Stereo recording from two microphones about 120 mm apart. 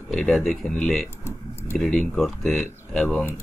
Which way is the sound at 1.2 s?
20° left (ahead or behind).